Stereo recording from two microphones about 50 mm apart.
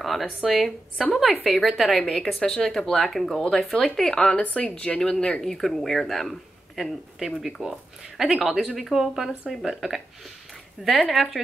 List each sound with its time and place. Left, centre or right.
0.0 s speech: centre
3.4 s speech: centre
4.4 s speech: left
5.4 s speech: centre